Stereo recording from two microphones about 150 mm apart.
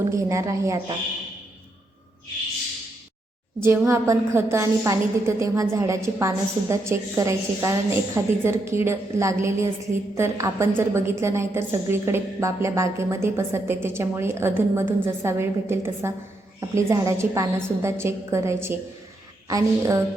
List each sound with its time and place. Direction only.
0.1 s a woman's voice: 20° right (ahead or behind)
3.6 s a woman's voice: 15° right (ahead or behind)